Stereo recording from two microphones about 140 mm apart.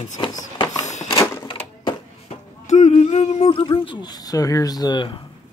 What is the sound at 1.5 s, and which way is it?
Wood, 35° left (ahead or behind).